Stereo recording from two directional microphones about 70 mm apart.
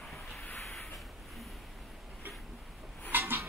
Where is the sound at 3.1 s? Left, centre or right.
Right.